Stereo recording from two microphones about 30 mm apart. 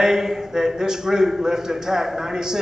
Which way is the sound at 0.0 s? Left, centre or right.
Centre.